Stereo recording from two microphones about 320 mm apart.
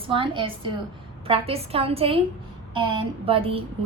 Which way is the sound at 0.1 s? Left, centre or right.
Centre.